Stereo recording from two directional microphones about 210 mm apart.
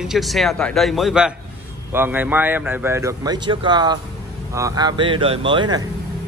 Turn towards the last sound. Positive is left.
turn(degrees=-20)  # may be behind; listen again after turning